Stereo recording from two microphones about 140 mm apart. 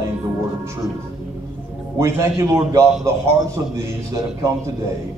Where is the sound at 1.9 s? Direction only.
20° right (ahead or behind).